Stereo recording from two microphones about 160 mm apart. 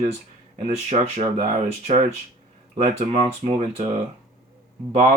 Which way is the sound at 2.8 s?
35° right (ahead or behind).